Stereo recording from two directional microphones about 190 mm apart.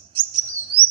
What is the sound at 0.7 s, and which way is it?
Chirp, 30° right (ahead or behind).